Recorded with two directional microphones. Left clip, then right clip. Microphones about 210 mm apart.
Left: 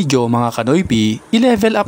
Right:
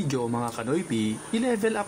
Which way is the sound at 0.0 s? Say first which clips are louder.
Left 13 dB; 50° left (ahead or behind).